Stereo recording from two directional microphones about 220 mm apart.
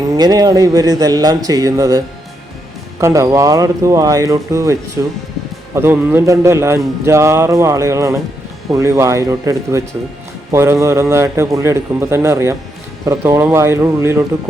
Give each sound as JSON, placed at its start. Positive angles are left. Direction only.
{"t": 0.1, "sound": "speech", "side_deg": -15}
{"t": 3.0, "sound": "speech", "side_deg": -15}